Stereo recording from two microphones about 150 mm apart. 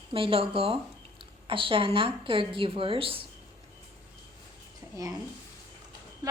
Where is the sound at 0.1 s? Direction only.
40° right (ahead or behind).